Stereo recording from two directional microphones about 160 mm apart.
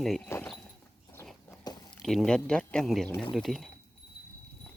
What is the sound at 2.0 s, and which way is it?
Speech, 5° left (ahead or behind).